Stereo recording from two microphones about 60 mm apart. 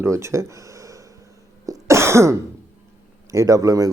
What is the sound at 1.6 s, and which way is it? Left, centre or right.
Cough, right.